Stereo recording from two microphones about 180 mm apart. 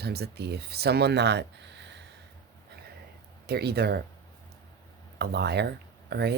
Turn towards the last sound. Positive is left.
turn(degrees=-65)  # may be behind; listen again after turning